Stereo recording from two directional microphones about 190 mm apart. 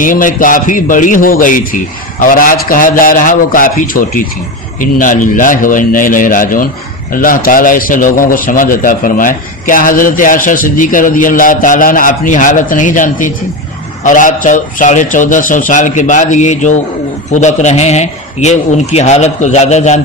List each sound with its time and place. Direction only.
0.0 s a man's voice: 45° left (ahead or behind)